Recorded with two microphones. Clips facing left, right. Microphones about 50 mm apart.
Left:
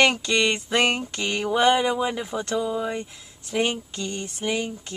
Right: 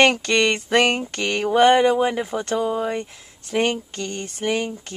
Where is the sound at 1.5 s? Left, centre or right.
Right.